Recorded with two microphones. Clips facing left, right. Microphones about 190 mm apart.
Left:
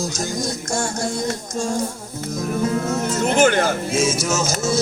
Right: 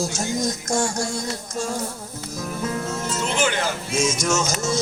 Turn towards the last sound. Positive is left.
turn(degrees=50)  # may be behind; listen again after turning